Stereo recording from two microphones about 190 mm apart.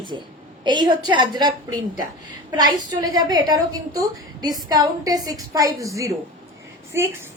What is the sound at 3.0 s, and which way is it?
A woman's voice, 20° right (ahead or behind).